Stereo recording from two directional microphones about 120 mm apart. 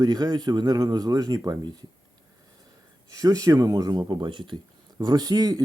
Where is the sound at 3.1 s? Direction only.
30° right (ahead or behind).